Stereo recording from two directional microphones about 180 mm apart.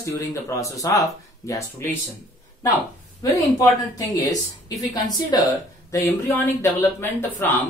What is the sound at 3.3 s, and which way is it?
Speech, 20° left (ahead or behind).